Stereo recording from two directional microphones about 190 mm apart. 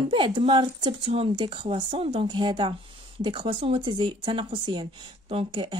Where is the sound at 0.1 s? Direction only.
25° right (ahead or behind).